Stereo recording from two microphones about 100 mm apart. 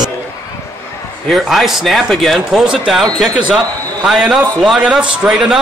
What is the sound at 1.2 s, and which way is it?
A man's voice, centre (ahead or behind).